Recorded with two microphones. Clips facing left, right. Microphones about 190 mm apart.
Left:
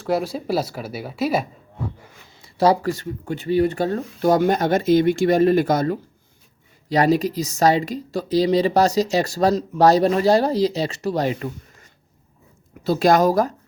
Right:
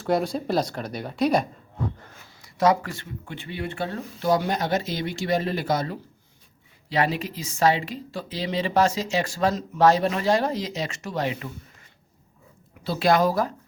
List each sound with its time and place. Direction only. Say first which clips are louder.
0.0 s speech: left 1 dB; centre (ahead or behind)
2.4 s speech: left 4 dB; 35° left (ahead or behind)